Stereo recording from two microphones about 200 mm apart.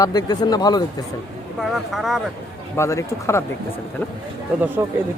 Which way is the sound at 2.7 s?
15° left (ahead or behind).